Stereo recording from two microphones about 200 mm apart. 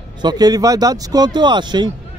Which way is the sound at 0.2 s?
20° right (ahead or behind).